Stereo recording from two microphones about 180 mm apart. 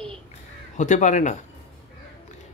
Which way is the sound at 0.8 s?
40° left (ahead or behind).